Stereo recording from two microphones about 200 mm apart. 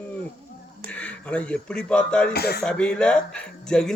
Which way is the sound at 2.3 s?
50° left (ahead or behind).